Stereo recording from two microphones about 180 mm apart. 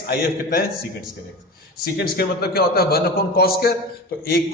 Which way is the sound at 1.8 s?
60° left (ahead or behind).